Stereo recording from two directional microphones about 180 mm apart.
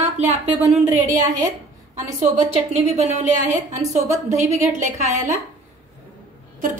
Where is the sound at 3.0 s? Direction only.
40° right (ahead or behind).